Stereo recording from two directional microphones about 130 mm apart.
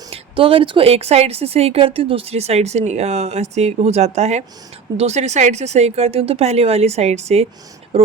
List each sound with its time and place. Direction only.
0.1 s speech: 45° right (ahead or behind)